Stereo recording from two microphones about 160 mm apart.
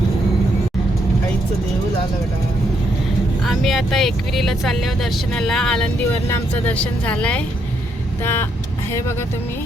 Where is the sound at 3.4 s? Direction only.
Centre (ahead or behind); by 9.2 s 15° left (ahead or behind).